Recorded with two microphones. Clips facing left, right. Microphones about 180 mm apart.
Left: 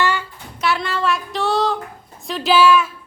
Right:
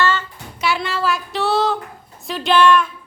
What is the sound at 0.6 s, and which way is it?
Child singing, centre (ahead or behind).